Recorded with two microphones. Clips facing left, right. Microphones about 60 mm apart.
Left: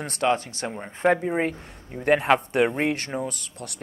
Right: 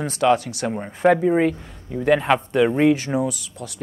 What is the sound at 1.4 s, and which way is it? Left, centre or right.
Speech, left.